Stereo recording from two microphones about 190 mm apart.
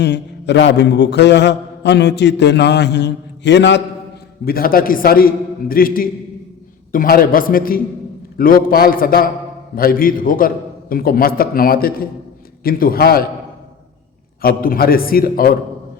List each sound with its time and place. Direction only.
0.0 s a man's voice: 65° left (ahead or behind)
4.4 s a man's voice: 50° left (ahead or behind)
14.4 s a man's voice: 50° left (ahead or behind)